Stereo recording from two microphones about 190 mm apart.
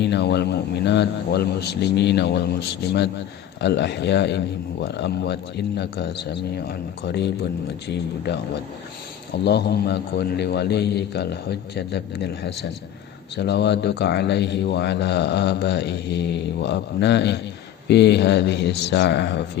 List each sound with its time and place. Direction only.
0.0 s a man's voice: 65° left (ahead or behind)